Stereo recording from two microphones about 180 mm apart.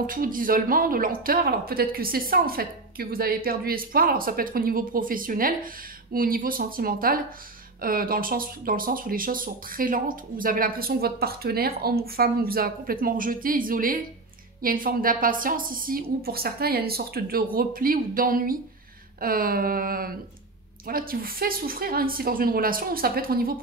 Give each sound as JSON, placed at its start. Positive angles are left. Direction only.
{"t": 0.0, "sound": "speech", "side_deg": -50}